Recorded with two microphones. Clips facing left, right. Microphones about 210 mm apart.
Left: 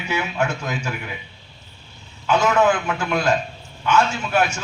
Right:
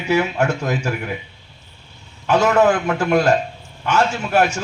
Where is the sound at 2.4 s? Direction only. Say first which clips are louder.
Right 3 dB; 40° right (ahead or behind).